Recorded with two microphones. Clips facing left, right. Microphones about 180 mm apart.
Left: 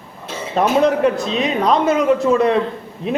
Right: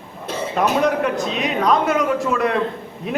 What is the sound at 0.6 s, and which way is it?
Speech, 30° left (ahead or behind).